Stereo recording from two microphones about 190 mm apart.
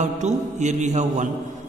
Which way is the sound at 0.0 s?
40° right (ahead or behind).